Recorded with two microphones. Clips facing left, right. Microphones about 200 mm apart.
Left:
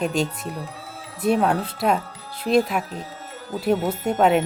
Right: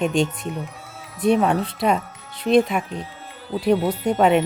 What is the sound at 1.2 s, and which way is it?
Speech, 5° left (ahead or behind).